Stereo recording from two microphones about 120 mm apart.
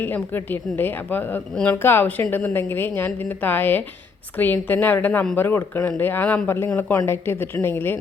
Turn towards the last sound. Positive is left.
turn(degrees=15)  # may be behind; listen again after turning